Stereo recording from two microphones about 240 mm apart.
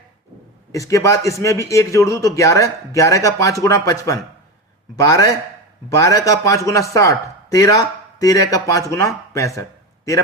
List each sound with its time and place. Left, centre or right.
0.7 s a man's voice: centre